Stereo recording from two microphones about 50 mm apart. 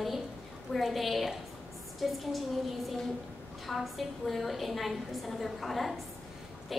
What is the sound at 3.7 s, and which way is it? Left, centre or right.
A woman's voice, centre.